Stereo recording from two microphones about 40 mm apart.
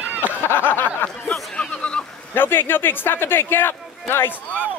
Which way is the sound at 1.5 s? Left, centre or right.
Left.